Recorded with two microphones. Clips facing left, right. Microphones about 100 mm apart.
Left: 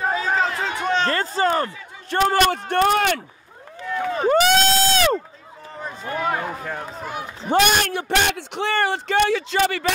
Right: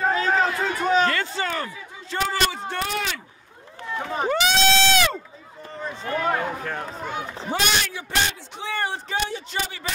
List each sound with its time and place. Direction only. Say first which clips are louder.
0.0 s run: even; 5° left (ahead or behind)
1.0 s a sound: left 4 dB; 40° left (ahead or behind)
2.0 s speech: left 7 dB; 55° left (ahead or behind)
4.3 s a sound: left 4 dB; 45° left (ahead or behind)
6.1 s speech: even; 10° left (ahead or behind)
7.5 s a man's voice: left 7 dB; 55° left (ahead or behind); by 9.9 s 75° left (ahead or behind)